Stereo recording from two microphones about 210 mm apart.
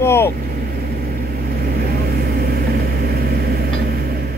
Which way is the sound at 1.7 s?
45° right (ahead or behind).